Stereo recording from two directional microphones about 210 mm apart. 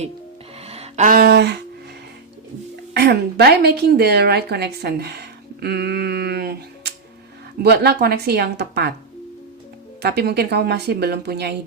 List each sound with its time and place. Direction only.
0.6 s a sound: 30° right (ahead or behind); by 1.6 s 55° right (ahead or behind)
2.9 s a woman's voice: 50° right (ahead or behind)
10.0 s speech: 50° right (ahead or behind)